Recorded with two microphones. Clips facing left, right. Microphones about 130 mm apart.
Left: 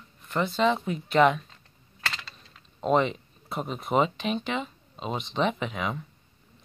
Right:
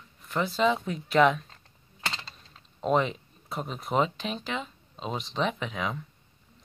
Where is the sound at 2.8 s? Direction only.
Centre (ahead or behind).